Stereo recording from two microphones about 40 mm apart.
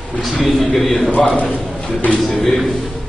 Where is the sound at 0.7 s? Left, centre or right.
Centre.